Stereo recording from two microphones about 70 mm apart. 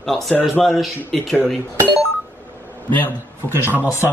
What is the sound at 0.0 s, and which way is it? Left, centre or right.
Speech, centre.